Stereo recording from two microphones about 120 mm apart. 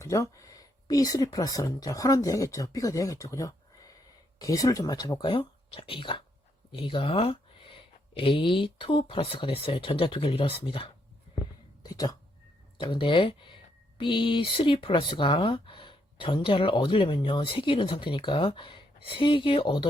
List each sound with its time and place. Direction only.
0.0 s speech: 25° left (ahead or behind); by 10.8 s 50° left (ahead or behind)
11.8 s a sound: 35° left (ahead or behind)
12.8 s speech: 45° left (ahead or behind)